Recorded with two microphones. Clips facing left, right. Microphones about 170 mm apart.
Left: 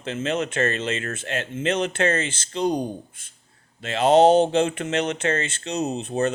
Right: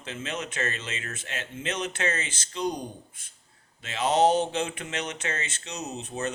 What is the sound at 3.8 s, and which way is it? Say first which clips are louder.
Speech: left 7 dB; 55° left (ahead or behind).